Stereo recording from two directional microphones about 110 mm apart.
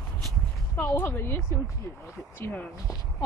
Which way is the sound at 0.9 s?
25° left (ahead or behind).